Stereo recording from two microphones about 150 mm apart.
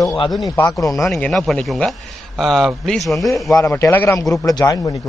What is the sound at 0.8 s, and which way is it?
Speech, 20° left (ahead or behind).